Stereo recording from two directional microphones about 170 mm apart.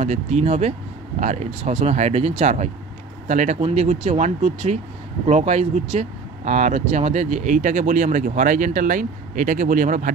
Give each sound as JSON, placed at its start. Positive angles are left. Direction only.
{"t": 0.0, "sound": "speech", "side_deg": -40}